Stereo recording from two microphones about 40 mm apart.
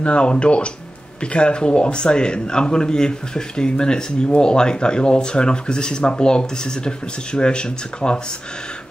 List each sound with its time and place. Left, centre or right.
0.0 s a man's voice: left